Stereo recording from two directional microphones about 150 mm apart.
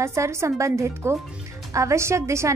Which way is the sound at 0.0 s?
20° right (ahead or behind).